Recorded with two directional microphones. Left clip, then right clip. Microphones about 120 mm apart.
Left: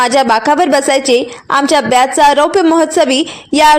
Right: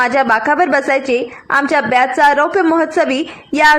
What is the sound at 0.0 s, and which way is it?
A woman's voice, 35° left (ahead or behind).